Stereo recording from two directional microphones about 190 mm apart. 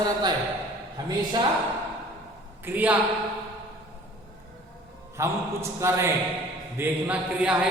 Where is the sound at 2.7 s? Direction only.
10° right (ahead or behind).